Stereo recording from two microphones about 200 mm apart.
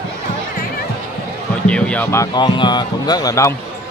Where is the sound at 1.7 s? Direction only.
5° left (ahead or behind).